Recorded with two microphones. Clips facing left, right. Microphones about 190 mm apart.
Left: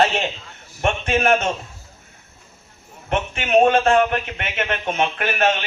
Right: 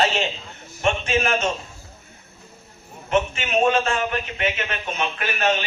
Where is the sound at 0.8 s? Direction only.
55° left (ahead or behind).